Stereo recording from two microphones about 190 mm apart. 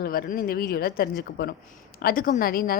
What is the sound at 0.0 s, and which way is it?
A woman's voice, 50° left (ahead or behind).